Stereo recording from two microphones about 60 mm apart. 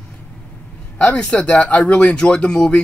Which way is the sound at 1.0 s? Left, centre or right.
Left.